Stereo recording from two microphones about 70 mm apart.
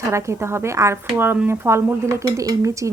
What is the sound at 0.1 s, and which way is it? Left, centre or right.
Speech, right.